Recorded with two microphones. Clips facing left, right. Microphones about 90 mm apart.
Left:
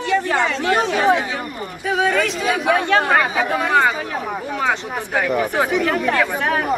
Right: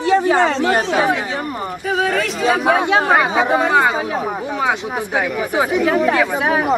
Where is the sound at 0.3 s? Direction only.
35° right (ahead or behind).